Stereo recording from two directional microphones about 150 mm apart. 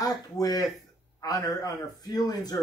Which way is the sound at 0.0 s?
25° left (ahead or behind).